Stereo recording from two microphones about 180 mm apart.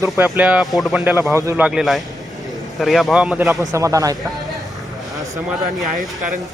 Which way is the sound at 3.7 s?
20° right (ahead or behind).